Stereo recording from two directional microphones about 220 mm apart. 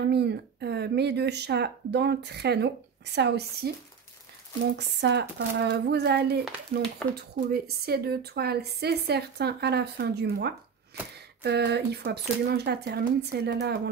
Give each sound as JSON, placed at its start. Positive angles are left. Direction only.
{"t": 0.1, "sound": "a woman's voice", "side_deg": -50}
{"t": 4.7, "sound": "a woman's voice", "side_deg": -55}